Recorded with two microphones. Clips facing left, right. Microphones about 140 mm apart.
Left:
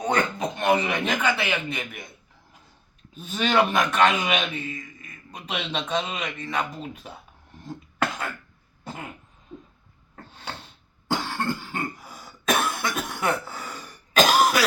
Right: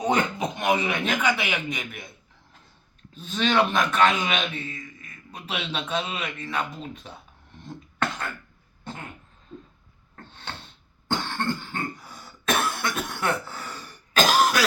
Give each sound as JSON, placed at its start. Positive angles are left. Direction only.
{"t": 0.0, "sound": "a sound", "side_deg": -20}
{"t": 0.6, "sound": "speech", "side_deg": -5}
{"t": 1.3, "sound": "speech", "side_deg": -15}
{"t": 1.8, "sound": "a man's voice", "side_deg": 0}
{"t": 3.2, "sound": "a man's voice", "side_deg": 5}
{"t": 7.6, "sound": "cough", "side_deg": 5}
{"t": 9.5, "sound": "a sound", "side_deg": 10}
{"t": 11.1, "sound": "cough", "side_deg": 5}